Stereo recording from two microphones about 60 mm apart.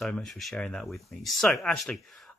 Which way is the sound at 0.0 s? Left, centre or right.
Centre.